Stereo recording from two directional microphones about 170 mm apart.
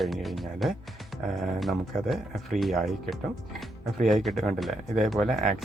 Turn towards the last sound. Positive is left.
turn(degrees=0)  # may be behind; listen again after turning